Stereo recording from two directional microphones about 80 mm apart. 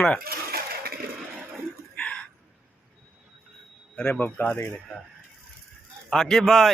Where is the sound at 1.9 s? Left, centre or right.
Centre.